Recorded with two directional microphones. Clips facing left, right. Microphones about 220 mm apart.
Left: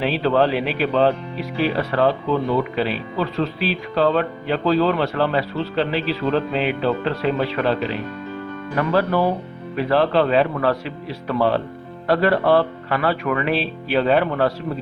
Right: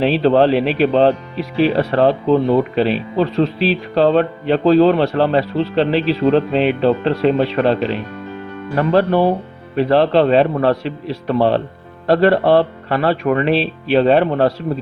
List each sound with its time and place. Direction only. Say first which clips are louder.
0.0 s speech: right 6 dB; 35° right (ahead or behind)